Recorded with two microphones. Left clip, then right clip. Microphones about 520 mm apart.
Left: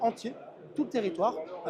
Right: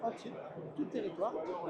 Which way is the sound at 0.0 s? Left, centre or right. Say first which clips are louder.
Left 9 dB; left.